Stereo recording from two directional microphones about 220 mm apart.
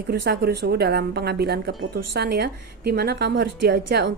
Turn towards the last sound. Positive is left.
turn(degrees=-45)  # may be behind; listen again after turning